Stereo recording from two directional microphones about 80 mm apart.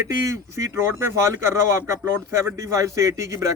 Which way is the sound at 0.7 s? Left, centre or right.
Right.